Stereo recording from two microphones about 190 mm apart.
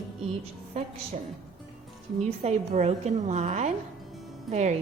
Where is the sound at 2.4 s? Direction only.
35° right (ahead or behind).